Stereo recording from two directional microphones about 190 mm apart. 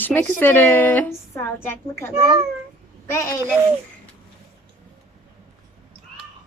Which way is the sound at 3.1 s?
15° left (ahead or behind).